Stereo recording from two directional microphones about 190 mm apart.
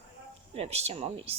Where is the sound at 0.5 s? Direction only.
35° right (ahead or behind).